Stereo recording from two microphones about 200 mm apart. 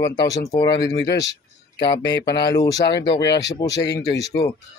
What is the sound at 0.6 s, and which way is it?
Speech, 60° left (ahead or behind).